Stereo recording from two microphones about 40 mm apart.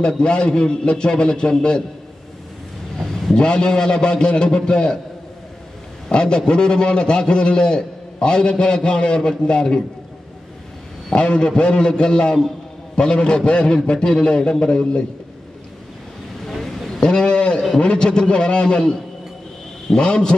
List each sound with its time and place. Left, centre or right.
0.0 s a man's voice: left
3.0 s vehicle: centre
3.3 s a man's voice: left
6.1 s a man's voice: left
11.1 s a man's voice: left
16.4 s a sound: centre
17.0 s a sound: left
17.7 s a man's voice: left